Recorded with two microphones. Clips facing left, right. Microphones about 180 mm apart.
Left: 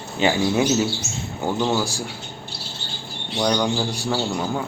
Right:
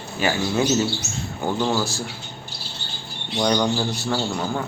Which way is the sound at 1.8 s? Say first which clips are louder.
Even; 10° left (ahead or behind).